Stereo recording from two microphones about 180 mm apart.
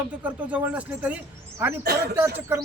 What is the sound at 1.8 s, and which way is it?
Speech, 60° right (ahead or behind).